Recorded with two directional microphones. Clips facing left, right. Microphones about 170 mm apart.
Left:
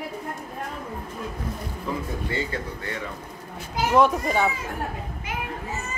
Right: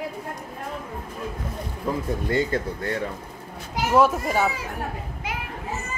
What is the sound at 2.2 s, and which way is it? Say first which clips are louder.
Speech: right 8 dB; 45° right (ahead or behind).